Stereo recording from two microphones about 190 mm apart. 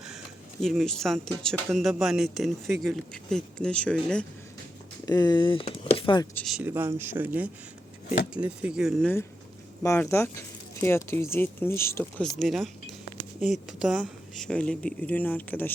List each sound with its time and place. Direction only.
0.6 s speech: centre (ahead or behind)
5.0 s speech: 20° left (ahead or behind)
6.3 s speech: centre (ahead or behind)
6.7 s speech: 10° right (ahead or behind)
9.8 s speech: 15° left (ahead or behind)
12.2 s speech: centre (ahead or behind)